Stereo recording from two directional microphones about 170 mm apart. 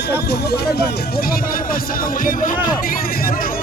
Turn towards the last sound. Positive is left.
turn(degrees=55)  # may be behind; listen again after turning